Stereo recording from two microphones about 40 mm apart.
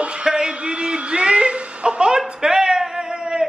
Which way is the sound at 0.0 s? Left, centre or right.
Right.